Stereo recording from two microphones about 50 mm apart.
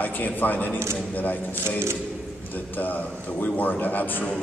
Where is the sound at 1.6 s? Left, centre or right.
Right.